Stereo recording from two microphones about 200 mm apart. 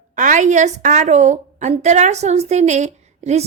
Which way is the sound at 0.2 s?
40° right (ahead or behind).